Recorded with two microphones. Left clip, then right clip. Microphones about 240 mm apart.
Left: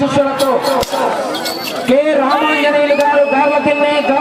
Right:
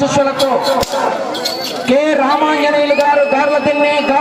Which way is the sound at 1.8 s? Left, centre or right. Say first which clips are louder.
Even; right.